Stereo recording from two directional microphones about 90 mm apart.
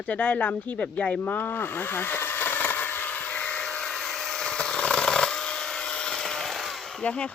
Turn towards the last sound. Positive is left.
turn(degrees=10)  # may be behind; listen again after turning